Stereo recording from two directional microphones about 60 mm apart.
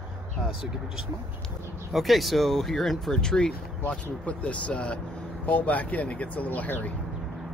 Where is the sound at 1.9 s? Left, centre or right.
Centre; by 6.9 s left.